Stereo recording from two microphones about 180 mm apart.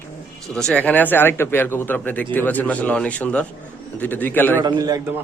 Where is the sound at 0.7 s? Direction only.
10° left (ahead or behind).